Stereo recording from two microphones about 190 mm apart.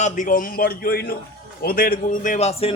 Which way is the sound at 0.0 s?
45° left (ahead or behind).